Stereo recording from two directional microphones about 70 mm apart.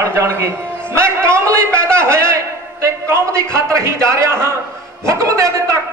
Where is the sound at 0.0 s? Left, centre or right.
Right.